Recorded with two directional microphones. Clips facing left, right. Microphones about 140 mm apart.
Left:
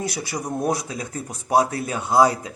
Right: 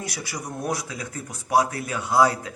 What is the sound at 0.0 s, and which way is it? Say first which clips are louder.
A man's voice: left 5 dB; 25° left (ahead or behind).